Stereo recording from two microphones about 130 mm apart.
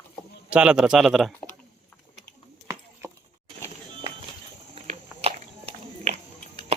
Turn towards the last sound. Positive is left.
turn(degrees=-55)  # may be behind; listen again after turning